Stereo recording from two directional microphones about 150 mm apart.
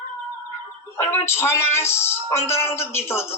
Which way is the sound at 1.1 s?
15° left (ahead or behind).